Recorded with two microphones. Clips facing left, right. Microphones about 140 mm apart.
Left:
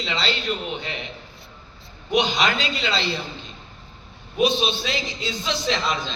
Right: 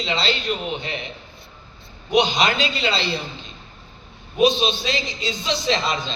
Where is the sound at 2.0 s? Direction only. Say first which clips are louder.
Right 2 dB; 20° right (ahead or behind).